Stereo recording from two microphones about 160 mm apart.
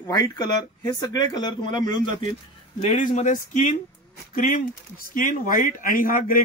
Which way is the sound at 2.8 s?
50° left (ahead or behind).